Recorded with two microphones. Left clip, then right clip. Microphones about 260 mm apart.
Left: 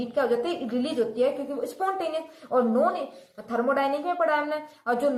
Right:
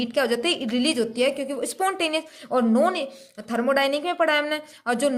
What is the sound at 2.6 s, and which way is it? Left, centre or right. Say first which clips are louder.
A woman's voice: right 2 dB; right.